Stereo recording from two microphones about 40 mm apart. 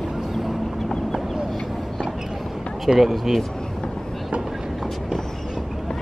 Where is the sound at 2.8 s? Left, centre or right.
Centre.